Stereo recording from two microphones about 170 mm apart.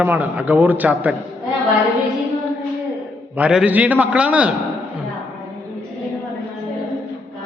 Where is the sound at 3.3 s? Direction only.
5° right (ahead or behind).